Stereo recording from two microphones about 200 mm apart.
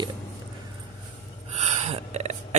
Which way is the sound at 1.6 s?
35° right (ahead or behind).